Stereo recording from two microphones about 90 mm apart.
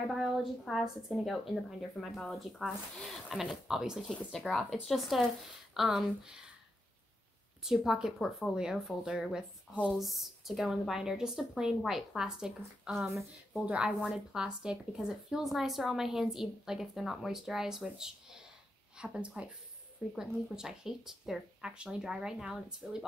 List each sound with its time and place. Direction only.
0.1 s speech: 5° right (ahead or behind)
4.1 s speech: 5° left (ahead or behind)
7.6 s speech: 5° right (ahead or behind)